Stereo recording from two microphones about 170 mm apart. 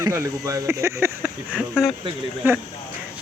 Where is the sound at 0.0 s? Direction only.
20° right (ahead or behind).